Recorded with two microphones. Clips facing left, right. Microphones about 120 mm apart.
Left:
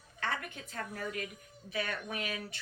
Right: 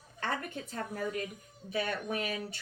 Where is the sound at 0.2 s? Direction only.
40° right (ahead or behind).